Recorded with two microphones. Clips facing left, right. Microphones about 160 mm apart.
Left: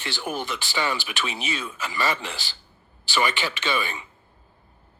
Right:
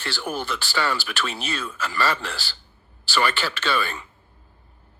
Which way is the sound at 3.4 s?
20° left (ahead or behind).